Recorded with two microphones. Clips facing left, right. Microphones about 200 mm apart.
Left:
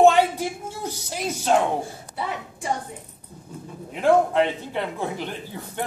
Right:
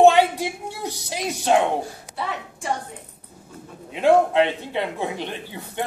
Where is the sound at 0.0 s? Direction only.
15° right (ahead or behind).